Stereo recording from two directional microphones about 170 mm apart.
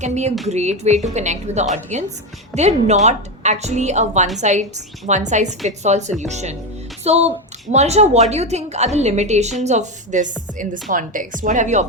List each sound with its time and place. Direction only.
0.0 s a woman's voice: 40° right (ahead or behind)